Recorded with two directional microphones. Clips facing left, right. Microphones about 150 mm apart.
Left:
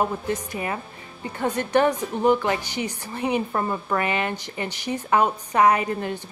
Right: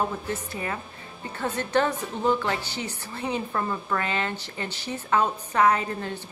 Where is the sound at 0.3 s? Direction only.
15° left (ahead or behind).